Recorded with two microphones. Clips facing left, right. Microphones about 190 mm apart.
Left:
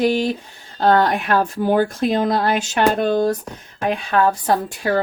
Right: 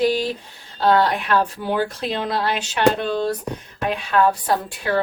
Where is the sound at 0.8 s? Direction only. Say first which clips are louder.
Left 2 dB; 50° left (ahead or behind).